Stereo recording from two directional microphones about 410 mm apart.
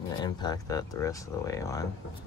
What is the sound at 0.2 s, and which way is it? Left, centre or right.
Speech, centre.